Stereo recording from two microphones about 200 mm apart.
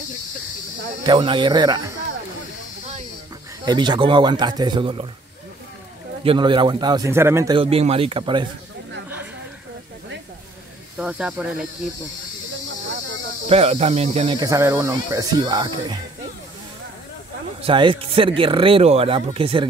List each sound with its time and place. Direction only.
1.0 s speech: 25° right (ahead or behind)
3.6 s speech: 20° right (ahead or behind)
6.2 s speech: 25° right (ahead or behind)
7.5 s speech: 30° right (ahead or behind)
11.0 s speech: 5° right (ahead or behind)
13.5 s speech: 30° right (ahead or behind)
17.6 s speech: 25° right (ahead or behind)